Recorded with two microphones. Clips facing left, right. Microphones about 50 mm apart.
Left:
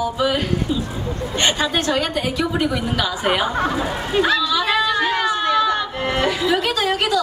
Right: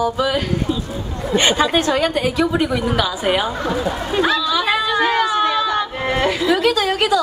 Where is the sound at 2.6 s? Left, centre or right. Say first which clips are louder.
Right 2 dB; centre.